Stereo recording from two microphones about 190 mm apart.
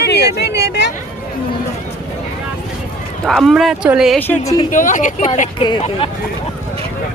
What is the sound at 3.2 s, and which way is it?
Speech, centre (ahead or behind).